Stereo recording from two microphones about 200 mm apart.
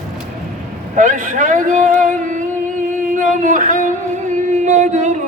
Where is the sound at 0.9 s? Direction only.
40° right (ahead or behind).